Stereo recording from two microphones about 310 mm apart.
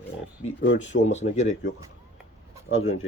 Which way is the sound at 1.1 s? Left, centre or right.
Left.